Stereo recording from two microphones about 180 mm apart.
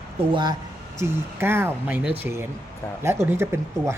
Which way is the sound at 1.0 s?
15° right (ahead or behind).